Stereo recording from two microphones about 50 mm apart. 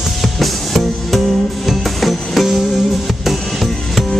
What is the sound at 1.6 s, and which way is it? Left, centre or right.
Music, centre.